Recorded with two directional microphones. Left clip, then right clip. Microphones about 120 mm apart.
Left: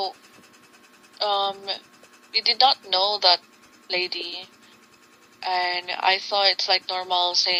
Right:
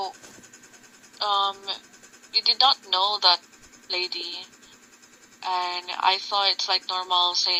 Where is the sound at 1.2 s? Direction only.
25° left (ahead or behind).